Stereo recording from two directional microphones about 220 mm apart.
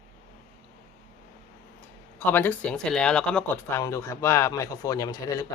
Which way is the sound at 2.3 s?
10° left (ahead or behind).